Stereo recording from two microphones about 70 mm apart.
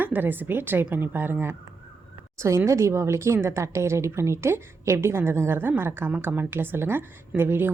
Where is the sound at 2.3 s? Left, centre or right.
Right.